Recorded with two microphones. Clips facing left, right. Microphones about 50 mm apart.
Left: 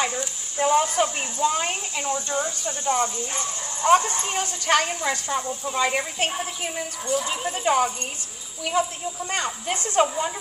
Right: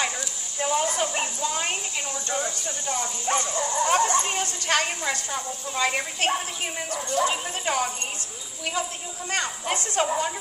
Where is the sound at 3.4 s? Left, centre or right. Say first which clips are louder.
Left 2 dB; right.